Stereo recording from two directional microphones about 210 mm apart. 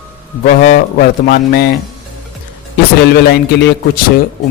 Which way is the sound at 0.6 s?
45° left (ahead or behind).